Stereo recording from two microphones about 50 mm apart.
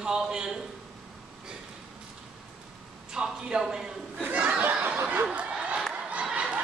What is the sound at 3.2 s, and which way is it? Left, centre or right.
Speech, centre.